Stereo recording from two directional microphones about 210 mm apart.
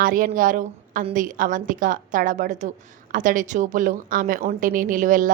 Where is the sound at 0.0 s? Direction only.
40° right (ahead or behind).